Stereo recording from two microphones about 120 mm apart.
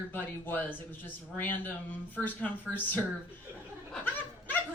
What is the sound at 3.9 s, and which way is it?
Goat, 15° left (ahead or behind).